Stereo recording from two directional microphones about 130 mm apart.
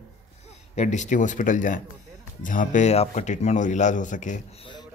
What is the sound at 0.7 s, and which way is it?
Speech, 65° left (ahead or behind).